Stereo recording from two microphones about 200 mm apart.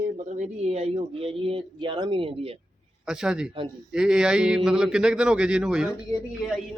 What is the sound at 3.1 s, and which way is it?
A man's voice, 5° right (ahead or behind).